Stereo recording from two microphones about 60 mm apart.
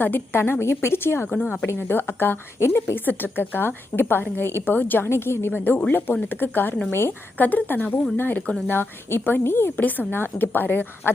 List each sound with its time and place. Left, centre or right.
0.0 s a woman's voice: left
7.4 s a woman's voice: left
9.7 s a woman's voice: left